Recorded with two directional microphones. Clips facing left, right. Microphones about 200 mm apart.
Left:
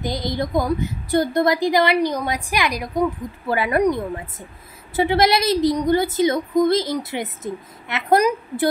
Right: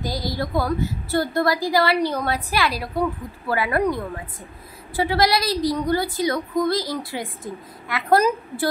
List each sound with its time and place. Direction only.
0.0 s a woman's voice: 20° left (ahead or behind)
4.9 s a woman's voice: 20° left (ahead or behind)